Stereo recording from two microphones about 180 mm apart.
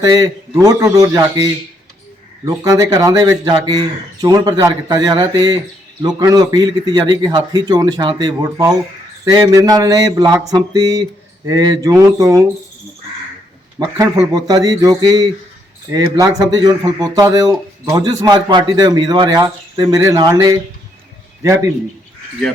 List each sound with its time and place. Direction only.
0.0 s speech: 20° right (ahead or behind)
13.7 s speech: 20° right (ahead or behind)